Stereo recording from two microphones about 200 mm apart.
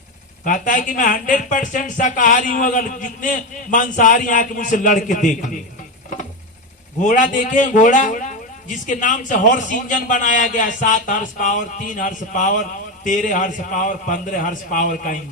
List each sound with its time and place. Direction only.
0.4 s a man's voice: 40° left (ahead or behind)
7.0 s a man's voice: 40° left (ahead or behind)